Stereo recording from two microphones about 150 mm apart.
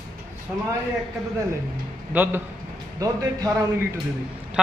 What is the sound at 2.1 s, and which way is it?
Speech, 10° right (ahead or behind).